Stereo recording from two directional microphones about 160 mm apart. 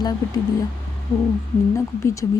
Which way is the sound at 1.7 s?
20° left (ahead or behind).